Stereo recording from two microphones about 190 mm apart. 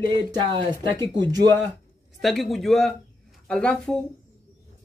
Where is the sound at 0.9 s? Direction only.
20° right (ahead or behind).